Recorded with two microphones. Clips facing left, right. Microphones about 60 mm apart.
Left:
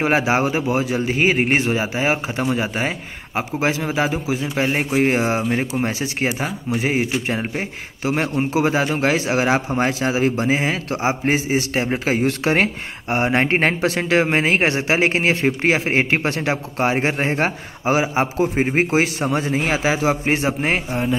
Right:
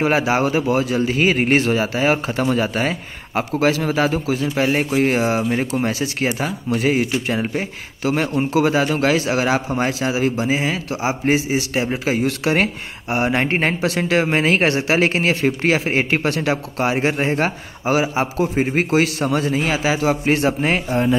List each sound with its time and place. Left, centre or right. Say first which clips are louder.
0.0 s a man's voice: even; left
5.4 s a man's voice: right 1 dB; centre
20.9 s speech: right 4 dB; centre